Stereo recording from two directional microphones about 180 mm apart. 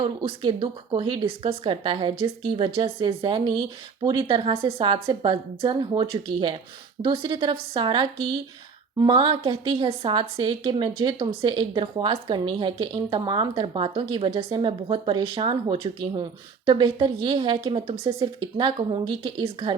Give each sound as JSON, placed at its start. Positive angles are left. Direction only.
{"t": 0.0, "sound": "a woman's voice", "side_deg": -30}